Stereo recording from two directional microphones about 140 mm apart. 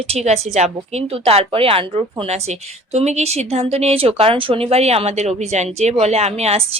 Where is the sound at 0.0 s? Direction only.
45° right (ahead or behind).